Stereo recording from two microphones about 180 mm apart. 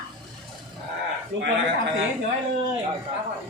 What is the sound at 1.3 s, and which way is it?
Speech, 90° right.